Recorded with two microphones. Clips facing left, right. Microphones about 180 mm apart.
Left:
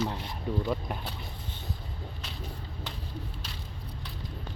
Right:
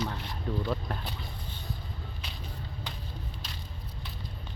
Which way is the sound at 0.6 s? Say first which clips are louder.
Left 1 dB; 5° left (ahead or behind).